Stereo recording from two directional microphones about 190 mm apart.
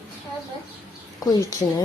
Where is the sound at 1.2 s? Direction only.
20° left (ahead or behind).